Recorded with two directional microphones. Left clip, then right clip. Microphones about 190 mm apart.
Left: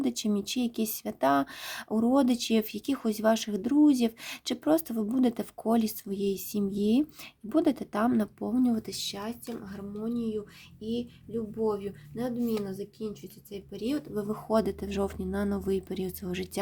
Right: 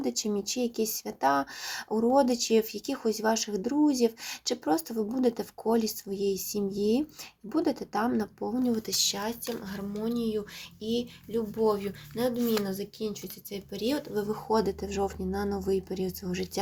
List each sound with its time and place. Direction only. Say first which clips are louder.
0.0 s speech: even; 50° left (ahead or behind)